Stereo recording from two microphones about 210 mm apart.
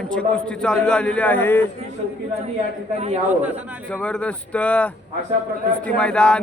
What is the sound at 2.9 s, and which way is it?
Speech, 30° right (ahead or behind).